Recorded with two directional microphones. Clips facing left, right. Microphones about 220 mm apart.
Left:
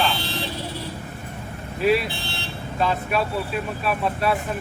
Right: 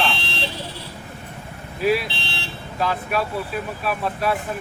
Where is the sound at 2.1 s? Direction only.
50° left (ahead or behind).